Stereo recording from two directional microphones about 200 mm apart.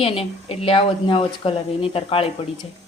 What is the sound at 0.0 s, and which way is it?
Speech, 30° left (ahead or behind).